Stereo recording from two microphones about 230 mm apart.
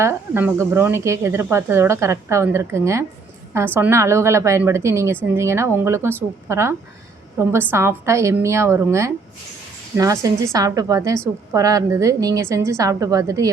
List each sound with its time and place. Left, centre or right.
0.0 s speech: centre